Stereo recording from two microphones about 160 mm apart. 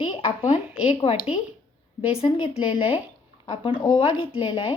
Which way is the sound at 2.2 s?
40° left (ahead or behind).